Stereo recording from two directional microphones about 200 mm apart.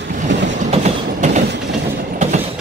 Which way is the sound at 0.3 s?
60° right (ahead or behind).